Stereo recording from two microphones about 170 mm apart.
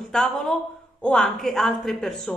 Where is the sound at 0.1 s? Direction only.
5° left (ahead or behind).